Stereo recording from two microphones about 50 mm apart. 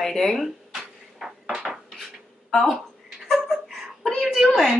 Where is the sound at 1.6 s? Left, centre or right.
Centre.